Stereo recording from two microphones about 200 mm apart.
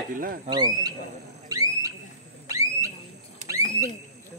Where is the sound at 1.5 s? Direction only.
15° right (ahead or behind).